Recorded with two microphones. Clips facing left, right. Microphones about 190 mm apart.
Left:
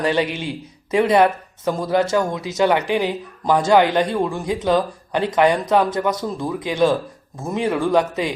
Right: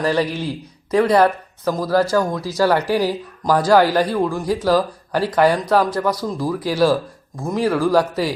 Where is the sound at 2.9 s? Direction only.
5° right (ahead or behind).